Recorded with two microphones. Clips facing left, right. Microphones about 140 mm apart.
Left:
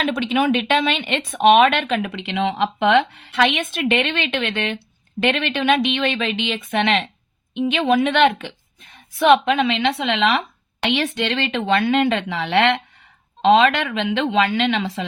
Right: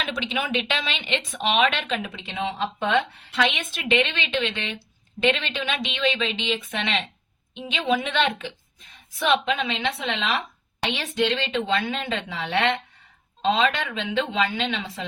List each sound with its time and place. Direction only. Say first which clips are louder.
0.0 s speech: left 9 dB; 55° left (ahead or behind); by 15.0 s 75° left (ahead or behind)